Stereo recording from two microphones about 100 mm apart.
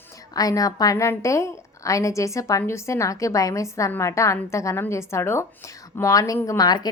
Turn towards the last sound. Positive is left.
turn(degrees=40)  # may be behind; listen again after turning